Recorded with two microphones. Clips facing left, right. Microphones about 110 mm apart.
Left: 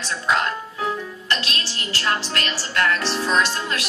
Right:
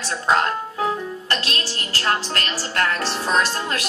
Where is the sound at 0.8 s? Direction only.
30° right (ahead or behind).